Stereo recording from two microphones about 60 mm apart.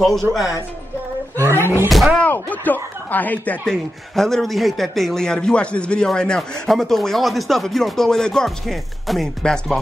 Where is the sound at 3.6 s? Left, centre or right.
Centre.